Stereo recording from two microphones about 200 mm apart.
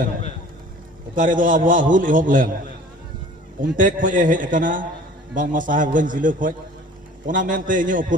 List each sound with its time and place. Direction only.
1.1 s a man's voice: 40° right (ahead or behind)
3.6 s a man's voice: 40° right (ahead or behind)